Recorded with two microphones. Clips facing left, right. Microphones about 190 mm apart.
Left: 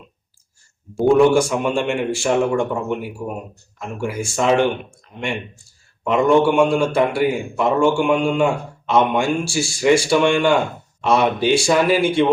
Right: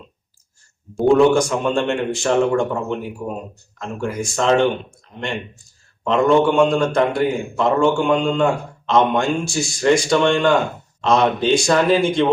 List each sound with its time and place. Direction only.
0.9 s a man's voice: 5° left (ahead or behind)
4.4 s a man's voice: 10° left (ahead or behind)
6.1 s a man's voice: 10° left (ahead or behind)